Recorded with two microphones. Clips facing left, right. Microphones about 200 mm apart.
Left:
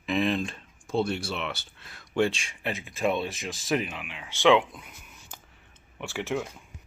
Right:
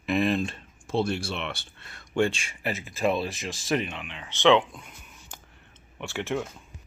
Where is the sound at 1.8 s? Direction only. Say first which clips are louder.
Even; centre (ahead or behind).